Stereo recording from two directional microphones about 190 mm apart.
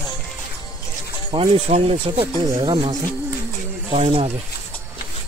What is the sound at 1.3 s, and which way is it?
Speech, 30° right (ahead or behind).